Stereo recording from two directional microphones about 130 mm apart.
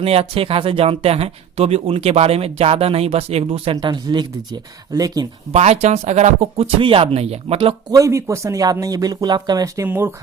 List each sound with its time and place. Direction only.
0.0 s speech: 50° right (ahead or behind)
3.8 s speech: 35° right (ahead or behind)
5.5 s speech: 55° right (ahead or behind)
7.9 s speech: 25° right (ahead or behind)
9.8 s speech: 15° right (ahead or behind)